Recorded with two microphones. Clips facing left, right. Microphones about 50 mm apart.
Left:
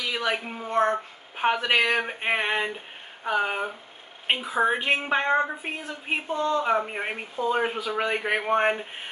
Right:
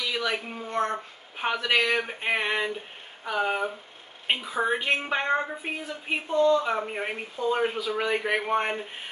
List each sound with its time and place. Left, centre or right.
0.0 s speech: centre